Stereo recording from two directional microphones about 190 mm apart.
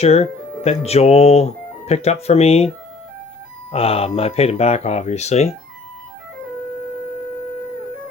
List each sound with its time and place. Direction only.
0.0 s speech: 35° left (ahead or behind)